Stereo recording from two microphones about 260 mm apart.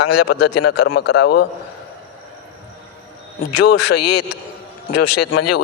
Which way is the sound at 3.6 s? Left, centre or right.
Left.